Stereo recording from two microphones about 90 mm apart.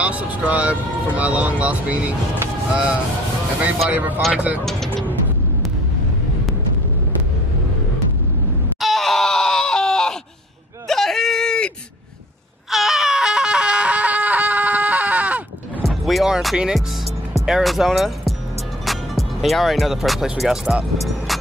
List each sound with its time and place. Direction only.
0.0 s speech: 15° right (ahead or behind)
8.8 s screaming: centre (ahead or behind)
10.9 s whimper: 5° left (ahead or behind)
12.7 s a sound: 5° right (ahead or behind)
16.1 s music: 5° right (ahead or behind)
17.5 s speech: 5° right (ahead or behind)